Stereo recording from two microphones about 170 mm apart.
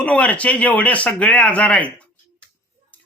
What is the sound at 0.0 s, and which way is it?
Speech, 10° left (ahead or behind).